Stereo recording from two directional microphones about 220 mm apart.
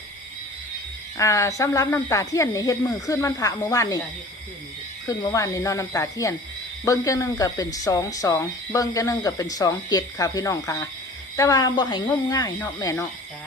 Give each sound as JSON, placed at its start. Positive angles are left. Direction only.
{"t": 1.1, "sound": "speech", "side_deg": 15}
{"t": 5.0, "sound": "speech", "side_deg": 15}